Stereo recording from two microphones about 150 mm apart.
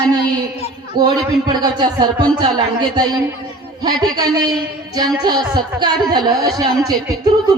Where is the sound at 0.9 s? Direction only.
30° right (ahead or behind).